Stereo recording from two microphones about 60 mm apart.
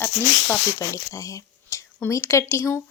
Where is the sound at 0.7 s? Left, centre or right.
Left.